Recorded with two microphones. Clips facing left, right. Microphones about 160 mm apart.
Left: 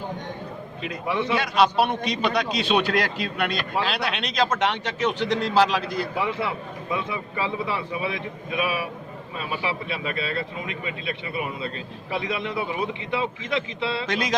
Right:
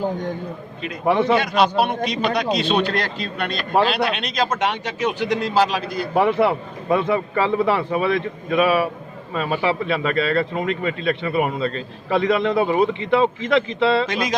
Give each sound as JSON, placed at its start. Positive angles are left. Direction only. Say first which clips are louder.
{"t": 1.0, "sound": "a man's voice", "louder": "right 8 dB", "side_deg": -55}
{"t": 1.4, "sound": "speech", "louder": "right 2 dB", "side_deg": 0}
{"t": 6.1, "sound": "a man's voice", "louder": "right 14 dB", "side_deg": -60}
{"t": 9.3, "sound": "a man's voice", "louder": "right 8 dB", "side_deg": -65}
{"t": 13.5, "sound": "a man's voice", "louder": "right 9 dB", "side_deg": -90}